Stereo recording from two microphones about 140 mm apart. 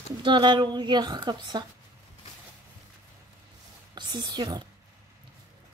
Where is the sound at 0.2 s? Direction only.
35° right (ahead or behind).